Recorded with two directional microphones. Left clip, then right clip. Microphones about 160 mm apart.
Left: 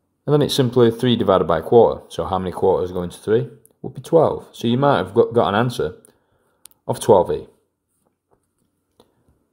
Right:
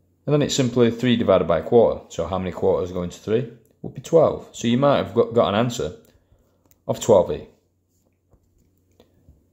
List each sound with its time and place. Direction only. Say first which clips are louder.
0.2 s speech: left 3 dB; 35° left (ahead or behind)